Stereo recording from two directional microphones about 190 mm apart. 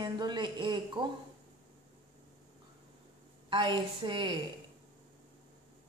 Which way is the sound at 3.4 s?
25° right (ahead or behind).